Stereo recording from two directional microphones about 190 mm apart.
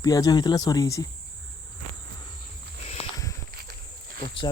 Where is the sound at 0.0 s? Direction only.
20° left (ahead or behind).